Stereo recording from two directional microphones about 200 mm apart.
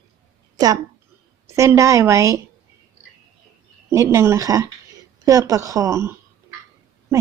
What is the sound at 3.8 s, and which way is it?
Speech, 15° right (ahead or behind).